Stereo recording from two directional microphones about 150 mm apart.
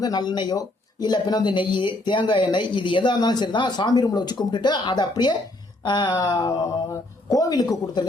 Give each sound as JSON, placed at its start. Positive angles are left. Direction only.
{"t": 0.0, "sound": "speech", "side_deg": 30}